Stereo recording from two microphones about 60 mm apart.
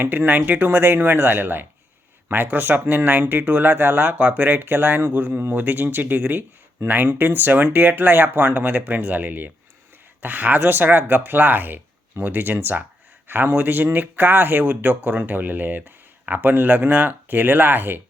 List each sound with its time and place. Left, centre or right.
0.0 s speech: right